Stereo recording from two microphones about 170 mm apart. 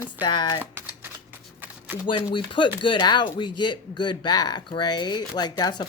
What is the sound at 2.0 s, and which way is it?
Speech, 30° left (ahead or behind).